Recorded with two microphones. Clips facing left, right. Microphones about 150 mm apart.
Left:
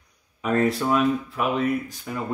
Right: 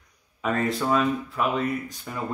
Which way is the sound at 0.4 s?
Centre (ahead or behind).